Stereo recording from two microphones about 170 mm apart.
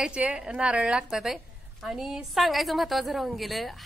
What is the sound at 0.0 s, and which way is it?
A woman's voice, 5° right (ahead or behind).